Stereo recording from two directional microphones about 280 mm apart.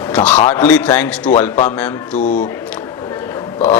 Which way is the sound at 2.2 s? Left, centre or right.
Left.